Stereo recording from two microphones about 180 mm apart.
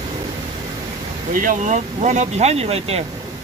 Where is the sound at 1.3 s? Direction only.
50° right (ahead or behind).